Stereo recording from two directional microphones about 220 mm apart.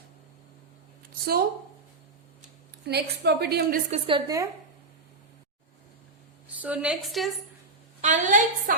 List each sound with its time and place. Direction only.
1.2 s a woman's voice: 45° right (ahead or behind)
2.8 s a woman's voice: 45° right (ahead or behind)
3.9 s a woman's voice: 25° right (ahead or behind)
6.6 s a woman's voice: 5° right (ahead or behind)
8.0 s a woman's voice: 35° right (ahead or behind)